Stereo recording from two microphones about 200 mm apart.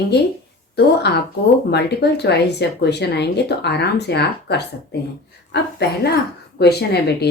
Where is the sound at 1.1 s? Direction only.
55° left (ahead or behind).